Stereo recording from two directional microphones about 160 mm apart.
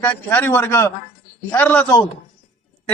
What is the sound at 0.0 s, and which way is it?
Speech, 10° left (ahead or behind).